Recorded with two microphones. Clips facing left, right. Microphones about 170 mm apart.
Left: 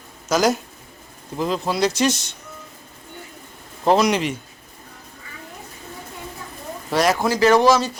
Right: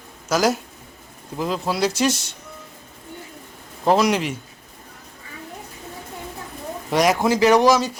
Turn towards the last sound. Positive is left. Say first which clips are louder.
# even
turn(degrees=-15)  # may be behind; listen again after turning